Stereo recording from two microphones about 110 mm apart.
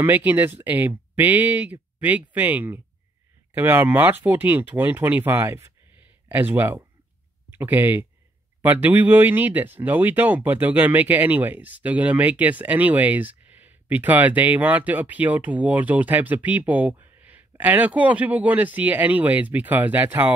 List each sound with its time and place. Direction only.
0.0 s speech: 15° right (ahead or behind)